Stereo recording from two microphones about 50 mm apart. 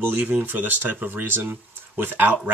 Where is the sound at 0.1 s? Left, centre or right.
Right.